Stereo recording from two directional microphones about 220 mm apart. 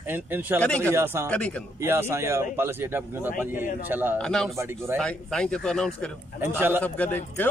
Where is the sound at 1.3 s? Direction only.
5° left (ahead or behind).